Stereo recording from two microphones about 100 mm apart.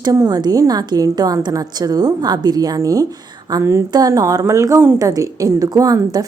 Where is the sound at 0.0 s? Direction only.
40° right (ahead or behind).